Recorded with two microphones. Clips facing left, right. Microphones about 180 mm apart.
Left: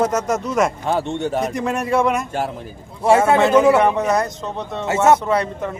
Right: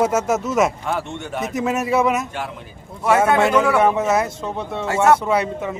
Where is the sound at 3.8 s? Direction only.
5° right (ahead or behind).